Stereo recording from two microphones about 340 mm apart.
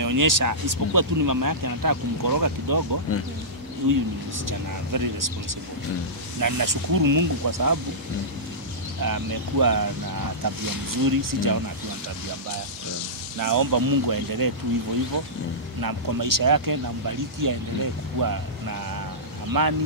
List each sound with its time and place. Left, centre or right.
0.0 s speech: right
3.1 s speech: left
4.5 s speech: right
6.4 s speech: right
9.0 s speech: right
13.4 s speech: right
15.8 s speech: right